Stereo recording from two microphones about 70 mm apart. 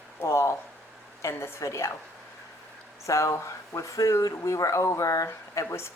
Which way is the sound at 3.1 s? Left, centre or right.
Left.